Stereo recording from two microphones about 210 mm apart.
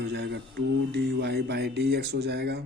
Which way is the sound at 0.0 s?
55° right (ahead or behind).